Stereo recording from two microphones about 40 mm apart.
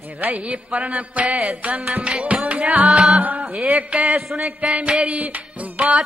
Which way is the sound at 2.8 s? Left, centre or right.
Centre.